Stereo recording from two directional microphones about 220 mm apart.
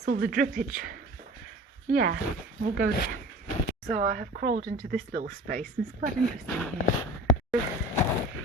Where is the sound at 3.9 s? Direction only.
35° right (ahead or behind).